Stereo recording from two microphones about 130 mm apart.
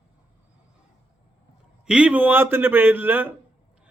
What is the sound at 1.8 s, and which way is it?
A man's voice, 10° right (ahead or behind).